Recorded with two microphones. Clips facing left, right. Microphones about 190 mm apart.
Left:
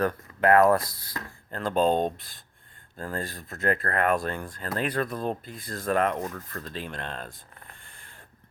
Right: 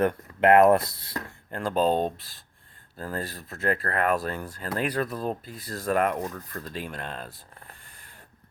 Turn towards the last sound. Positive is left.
turn(degrees=-5)  # may be behind; listen again after turning